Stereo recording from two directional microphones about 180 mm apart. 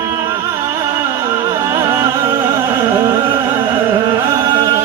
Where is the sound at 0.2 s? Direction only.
15° right (ahead or behind).